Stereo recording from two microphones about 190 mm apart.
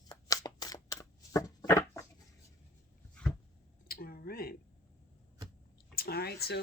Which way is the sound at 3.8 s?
50° left (ahead or behind).